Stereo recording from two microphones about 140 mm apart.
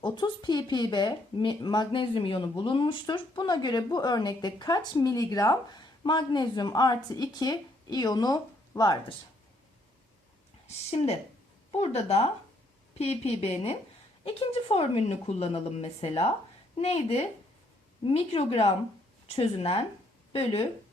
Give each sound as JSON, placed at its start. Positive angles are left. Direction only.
{"t": 0.0, "sound": "speech", "side_deg": 30}
{"t": 11.7, "sound": "a woman's voice", "side_deg": 50}